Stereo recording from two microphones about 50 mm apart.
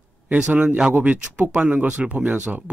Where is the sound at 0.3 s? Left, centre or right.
Right.